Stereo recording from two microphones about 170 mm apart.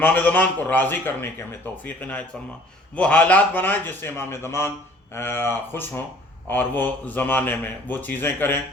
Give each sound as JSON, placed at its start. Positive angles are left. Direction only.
{"t": 0.0, "sound": "a man's voice", "side_deg": 10}